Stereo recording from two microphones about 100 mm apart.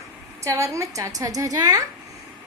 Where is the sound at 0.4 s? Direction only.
30° right (ahead or behind).